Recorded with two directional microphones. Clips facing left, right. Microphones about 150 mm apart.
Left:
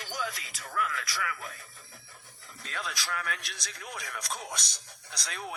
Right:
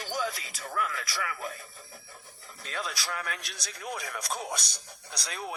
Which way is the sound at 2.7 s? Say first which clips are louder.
Right 1 dB; 35° right (ahead or behind).